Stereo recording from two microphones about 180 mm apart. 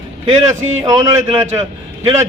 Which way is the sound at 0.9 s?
20° right (ahead or behind).